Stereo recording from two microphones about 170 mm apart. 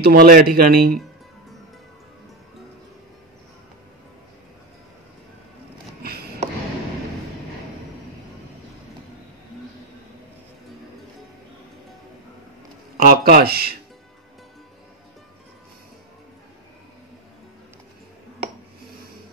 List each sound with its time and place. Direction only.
0.0 s speech: 60° right (ahead or behind)
12.9 s speech: 60° right (ahead or behind)